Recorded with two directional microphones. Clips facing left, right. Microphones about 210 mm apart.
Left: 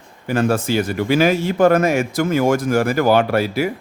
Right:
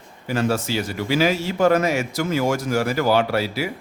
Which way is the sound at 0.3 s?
55° left (ahead or behind).